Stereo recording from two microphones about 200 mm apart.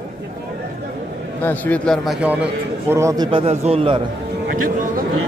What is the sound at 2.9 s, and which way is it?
Speech, 15° right (ahead or behind).